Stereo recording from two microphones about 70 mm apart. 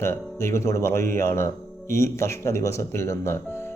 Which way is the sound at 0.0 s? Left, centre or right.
Left.